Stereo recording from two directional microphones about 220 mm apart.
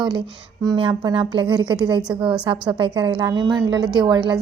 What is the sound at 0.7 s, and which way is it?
A woman's voice, 20° right (ahead or behind).